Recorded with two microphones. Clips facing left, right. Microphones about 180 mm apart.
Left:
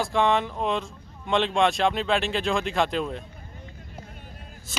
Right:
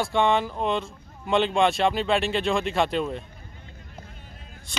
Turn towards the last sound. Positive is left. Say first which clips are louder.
# right 1 dB
turn(degrees=0)  # may be behind; listen again after turning